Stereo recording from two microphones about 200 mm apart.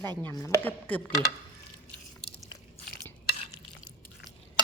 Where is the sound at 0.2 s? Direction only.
10° left (ahead or behind).